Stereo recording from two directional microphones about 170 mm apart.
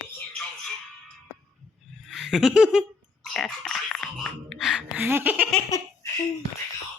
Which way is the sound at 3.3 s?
Centre (ahead or behind).